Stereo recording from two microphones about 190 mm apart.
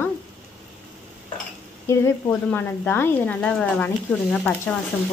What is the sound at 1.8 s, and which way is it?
Speech, 10° left (ahead or behind).